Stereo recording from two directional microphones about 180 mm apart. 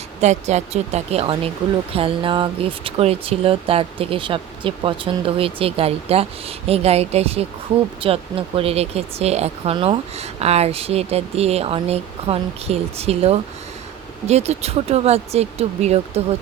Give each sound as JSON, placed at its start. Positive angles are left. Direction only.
{"t": 0.2, "sound": "speech", "side_deg": -40}